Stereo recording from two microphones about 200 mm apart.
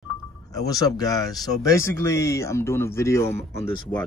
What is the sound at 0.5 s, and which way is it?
Speech, 20° left (ahead or behind).